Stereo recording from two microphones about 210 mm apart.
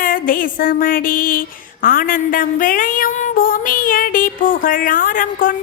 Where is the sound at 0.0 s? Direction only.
40° left (ahead or behind).